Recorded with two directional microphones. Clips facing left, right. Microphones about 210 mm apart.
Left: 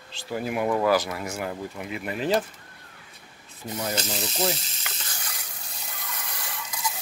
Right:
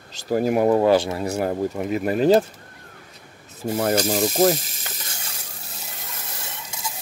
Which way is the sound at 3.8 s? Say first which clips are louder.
Right 10 dB; 50° right (ahead or behind).